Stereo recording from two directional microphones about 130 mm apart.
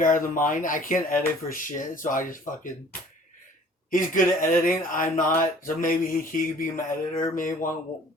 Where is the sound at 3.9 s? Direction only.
90° left.